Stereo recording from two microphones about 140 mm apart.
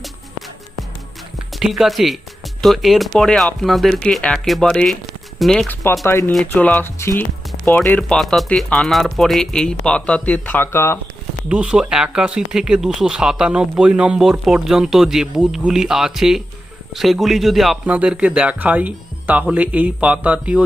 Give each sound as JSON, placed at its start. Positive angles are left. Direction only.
{"t": 0.0, "sound": "music", "side_deg": 0}
{"t": 1.5, "sound": "speech", "side_deg": 0}
{"t": 6.1, "sound": "speech", "side_deg": 15}
{"t": 11.4, "sound": "speech", "side_deg": -5}